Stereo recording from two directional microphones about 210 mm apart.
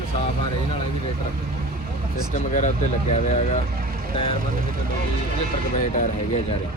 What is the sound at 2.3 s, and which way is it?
Speech, 35° left (ahead or behind).